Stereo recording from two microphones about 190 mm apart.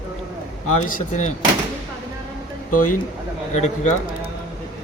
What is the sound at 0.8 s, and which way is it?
Speech, 45° left (ahead or behind).